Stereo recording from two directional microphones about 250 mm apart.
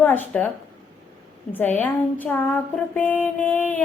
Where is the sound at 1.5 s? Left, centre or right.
Centre.